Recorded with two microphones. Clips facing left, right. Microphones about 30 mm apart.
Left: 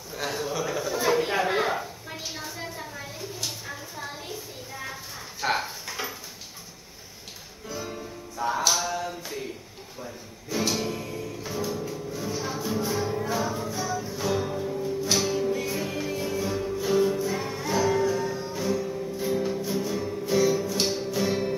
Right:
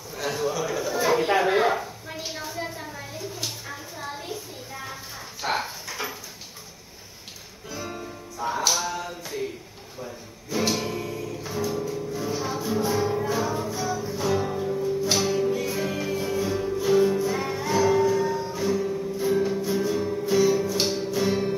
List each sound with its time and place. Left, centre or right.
0.2 s a sound: centre
7.6 s music: centre
8.4 s a sound: centre
10.6 s music: centre
20.0 s music: centre
20.2 s music: centre